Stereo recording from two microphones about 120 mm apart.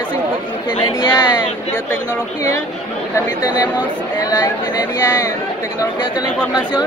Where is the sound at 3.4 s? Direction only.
35° left (ahead or behind).